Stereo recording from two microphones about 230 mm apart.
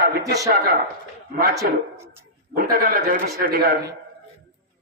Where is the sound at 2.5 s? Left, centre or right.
Right.